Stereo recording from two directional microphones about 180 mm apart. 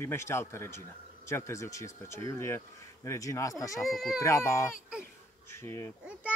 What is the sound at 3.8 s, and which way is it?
Speech, centre (ahead or behind).